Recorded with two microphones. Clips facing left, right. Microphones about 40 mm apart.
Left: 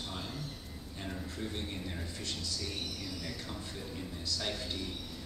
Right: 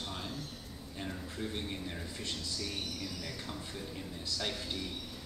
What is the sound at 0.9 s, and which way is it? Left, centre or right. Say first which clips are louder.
Speech: even; centre.